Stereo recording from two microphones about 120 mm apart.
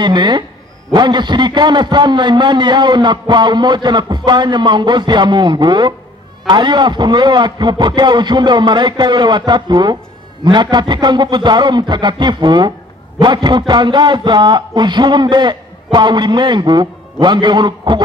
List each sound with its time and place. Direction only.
0.0 s a man's voice: 40° right (ahead or behind)